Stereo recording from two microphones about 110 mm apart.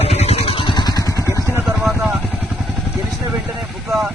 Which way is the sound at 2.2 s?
10° left (ahead or behind).